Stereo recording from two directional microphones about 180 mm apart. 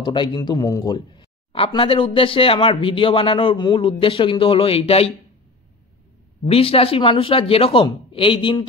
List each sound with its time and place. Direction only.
0.0 s speech: 25° left (ahead or behind)
6.4 s speech: 30° left (ahead or behind)